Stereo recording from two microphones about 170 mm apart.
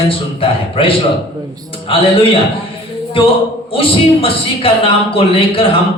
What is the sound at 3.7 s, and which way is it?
A man's voice, 35° left (ahead or behind).